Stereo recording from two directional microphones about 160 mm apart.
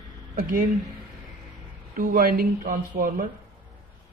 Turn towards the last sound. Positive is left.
turn(degrees=-60)  # may be behind; listen again after turning